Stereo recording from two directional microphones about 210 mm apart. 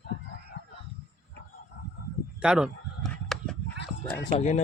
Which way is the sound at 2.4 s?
5° right (ahead or behind).